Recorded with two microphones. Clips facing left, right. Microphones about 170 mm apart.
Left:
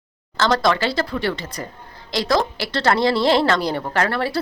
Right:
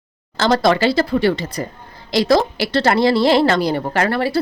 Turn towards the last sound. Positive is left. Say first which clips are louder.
# right 3 dB
turn(degrees=-5)  # may be behind; listen again after turning